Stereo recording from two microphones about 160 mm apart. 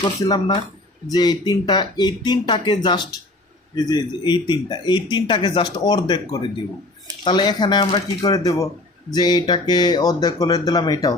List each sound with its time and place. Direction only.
0.0 s speech: 25° left (ahead or behind)
7.3 s speech: 25° left (ahead or behind)